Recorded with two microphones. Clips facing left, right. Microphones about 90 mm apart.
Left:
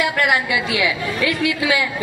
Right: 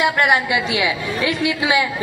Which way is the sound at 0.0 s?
20° right (ahead or behind).